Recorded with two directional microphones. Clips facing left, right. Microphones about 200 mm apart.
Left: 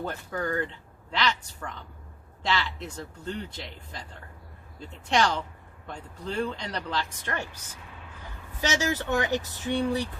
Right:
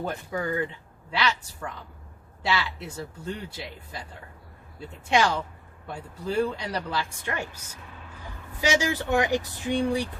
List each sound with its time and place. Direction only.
0.0 s speech: 10° right (ahead or behind)
8.6 s speech: 15° right (ahead or behind)